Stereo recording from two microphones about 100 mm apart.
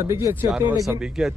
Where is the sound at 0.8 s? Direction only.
5° right (ahead or behind).